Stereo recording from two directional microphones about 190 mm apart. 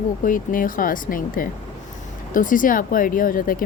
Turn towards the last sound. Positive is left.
turn(degrees=45)  # may be behind; listen again after turning